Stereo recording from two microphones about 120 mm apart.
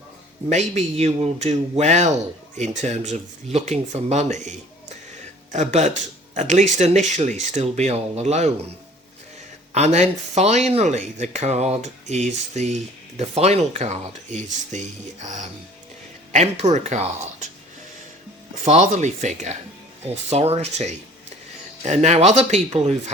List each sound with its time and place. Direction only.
0.5 s speech: 70° right (ahead or behind)
9.7 s speech: 65° right (ahead or behind); by 15.4 s 85° right
16.3 s speech: 65° right (ahead or behind)
18.6 s speech: 70° right (ahead or behind)
20.3 s a man's voice: 60° right (ahead or behind)